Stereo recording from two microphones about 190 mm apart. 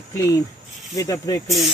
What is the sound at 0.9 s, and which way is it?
Speech, 20° left (ahead or behind).